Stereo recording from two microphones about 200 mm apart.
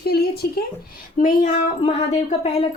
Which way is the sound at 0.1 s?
50° left (ahead or behind).